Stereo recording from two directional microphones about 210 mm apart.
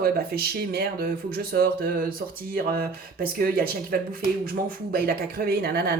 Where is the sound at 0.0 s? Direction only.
45° right (ahead or behind).